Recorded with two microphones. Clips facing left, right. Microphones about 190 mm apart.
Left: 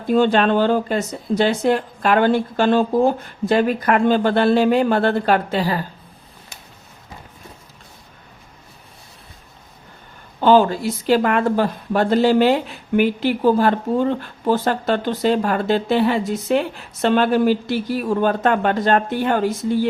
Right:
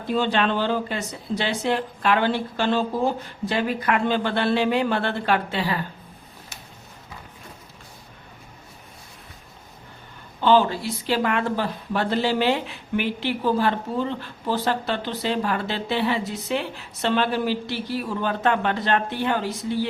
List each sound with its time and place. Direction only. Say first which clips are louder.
0.1 s speech: left 7 dB; 50° left (ahead or behind)
10.4 s speech: left 5 dB; 45° left (ahead or behind)